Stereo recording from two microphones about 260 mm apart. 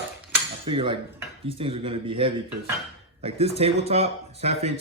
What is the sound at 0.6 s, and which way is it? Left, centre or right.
Speech, centre.